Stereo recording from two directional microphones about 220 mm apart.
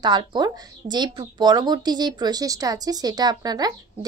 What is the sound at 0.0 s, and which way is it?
Speech, 20° right (ahead or behind).